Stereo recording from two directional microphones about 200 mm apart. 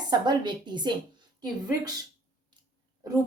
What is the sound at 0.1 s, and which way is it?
Speech, 20° right (ahead or behind).